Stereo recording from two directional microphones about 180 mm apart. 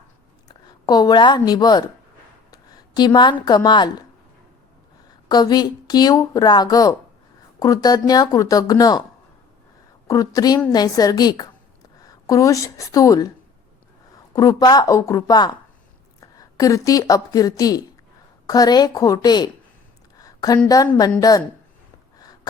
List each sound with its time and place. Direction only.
0.4 s speech: 25° left (ahead or behind)
2.5 s a sound: 20° left (ahead or behind)
3.4 s speech: 25° left (ahead or behind)
5.3 s speech: 25° left (ahead or behind)
10.1 s a woman's voice: 20° left (ahead or behind)
14.3 s a woman's voice: 20° left (ahead or behind)
20.1 s a sound: 20° left (ahead or behind)
20.7 s speech: 20° left (ahead or behind)